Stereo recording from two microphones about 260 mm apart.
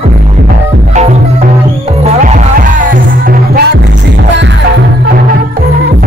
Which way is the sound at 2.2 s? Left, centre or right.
Right.